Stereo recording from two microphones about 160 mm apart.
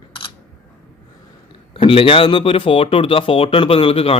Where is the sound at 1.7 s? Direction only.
35° left (ahead or behind).